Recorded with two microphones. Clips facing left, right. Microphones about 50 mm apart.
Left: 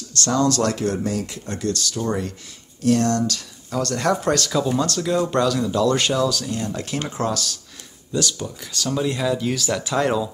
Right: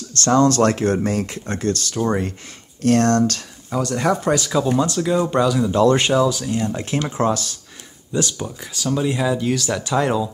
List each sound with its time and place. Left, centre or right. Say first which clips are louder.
0.1 s speech: right 4 dB; right
3.7 s speech: right 2 dB; centre
5.7 s speech: right 4 dB; right
8.9 s speech: right 2 dB; centre